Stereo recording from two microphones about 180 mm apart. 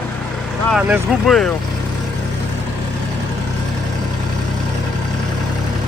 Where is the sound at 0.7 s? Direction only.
Centre (ahead or behind).